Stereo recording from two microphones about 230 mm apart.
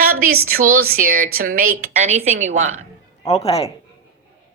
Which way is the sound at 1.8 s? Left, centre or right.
Right.